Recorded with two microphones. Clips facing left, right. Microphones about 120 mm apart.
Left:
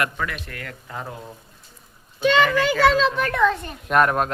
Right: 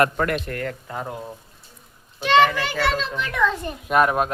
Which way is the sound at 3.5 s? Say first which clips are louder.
Even; 5° right (ahead or behind).